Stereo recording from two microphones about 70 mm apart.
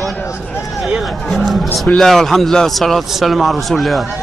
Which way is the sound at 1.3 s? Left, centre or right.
Centre.